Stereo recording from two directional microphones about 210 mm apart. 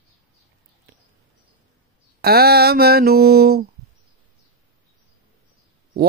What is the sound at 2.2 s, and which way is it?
Mantra, 50° right (ahead or behind).